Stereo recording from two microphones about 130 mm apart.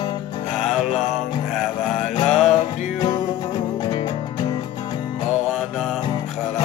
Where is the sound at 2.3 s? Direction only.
60° left (ahead or behind).